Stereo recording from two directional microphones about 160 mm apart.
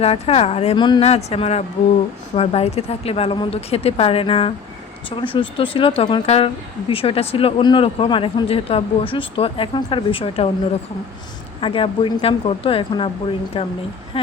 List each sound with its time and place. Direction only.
0.0 s speech: 40° left (ahead or behind)
6.2 s speech: 40° left (ahead or behind)
11.6 s speech: 35° left (ahead or behind)